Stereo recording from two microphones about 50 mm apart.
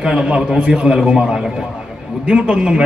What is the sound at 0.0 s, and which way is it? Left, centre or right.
A man's voice, centre.